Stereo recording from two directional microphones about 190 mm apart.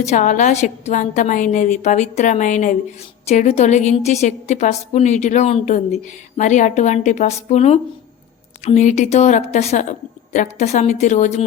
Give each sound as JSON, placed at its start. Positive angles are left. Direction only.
{"t": 0.0, "sound": "a woman's voice", "side_deg": 40}